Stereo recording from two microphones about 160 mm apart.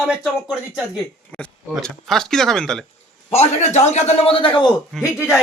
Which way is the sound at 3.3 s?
45° left (ahead or behind).